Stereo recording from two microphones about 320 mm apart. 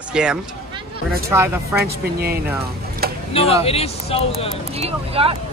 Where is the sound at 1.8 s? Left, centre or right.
Right.